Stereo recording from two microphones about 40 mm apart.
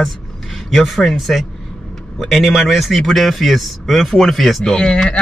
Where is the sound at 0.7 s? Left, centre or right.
Centre.